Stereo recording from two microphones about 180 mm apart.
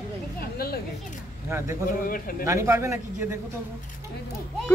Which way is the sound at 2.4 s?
15° right (ahead or behind).